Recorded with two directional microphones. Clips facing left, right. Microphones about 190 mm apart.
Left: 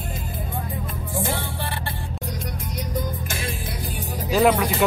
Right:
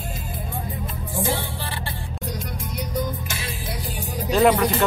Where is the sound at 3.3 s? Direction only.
50° left (ahead or behind).